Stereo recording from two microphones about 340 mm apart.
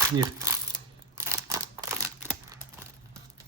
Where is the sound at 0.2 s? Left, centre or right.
Centre.